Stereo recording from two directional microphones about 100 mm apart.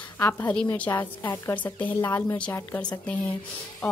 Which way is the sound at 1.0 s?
45° left (ahead or behind).